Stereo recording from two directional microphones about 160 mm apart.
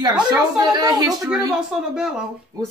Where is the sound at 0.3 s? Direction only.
25° right (ahead or behind).